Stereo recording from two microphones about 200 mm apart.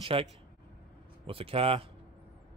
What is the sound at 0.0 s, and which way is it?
Speech, 25° right (ahead or behind).